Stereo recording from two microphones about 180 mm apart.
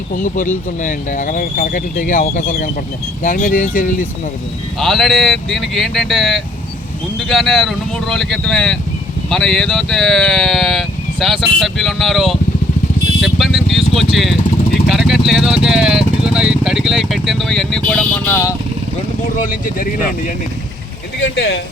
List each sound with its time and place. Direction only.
0.1 s speech: 50° left (ahead or behind)
4.8 s speech: centre (ahead or behind)
13.2 s vehicle: centre (ahead or behind)
14.8 s speech: centre (ahead or behind)
19.4 s speech: 50° left (ahead or behind)
21.2 s speech: 80° left